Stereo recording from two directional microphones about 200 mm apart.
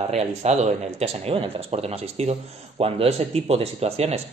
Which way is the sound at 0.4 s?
35° right (ahead or behind).